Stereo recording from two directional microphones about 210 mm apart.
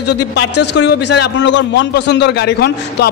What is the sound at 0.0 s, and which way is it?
A man's voice, 55° left (ahead or behind).